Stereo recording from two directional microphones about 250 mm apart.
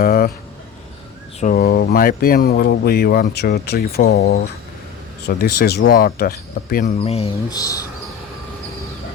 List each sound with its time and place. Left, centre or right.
0.0 s a sound: left
1.4 s speech: left
5.5 s speech: left
7.0 s speech: left